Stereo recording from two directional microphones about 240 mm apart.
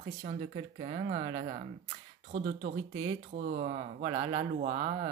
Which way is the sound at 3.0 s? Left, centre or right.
Right.